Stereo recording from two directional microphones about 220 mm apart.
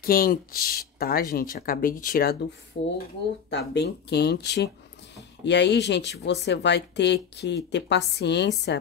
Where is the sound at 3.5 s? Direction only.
50° left (ahead or behind).